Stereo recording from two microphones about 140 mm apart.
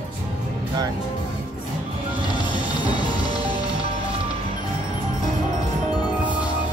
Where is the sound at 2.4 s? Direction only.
35° left (ahead or behind).